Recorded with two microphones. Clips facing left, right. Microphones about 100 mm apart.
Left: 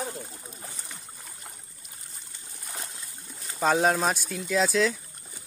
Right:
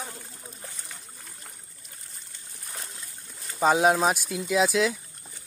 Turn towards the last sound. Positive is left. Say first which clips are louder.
# right 1 dB
turn(degrees=-10)  # may be behind; listen again after turning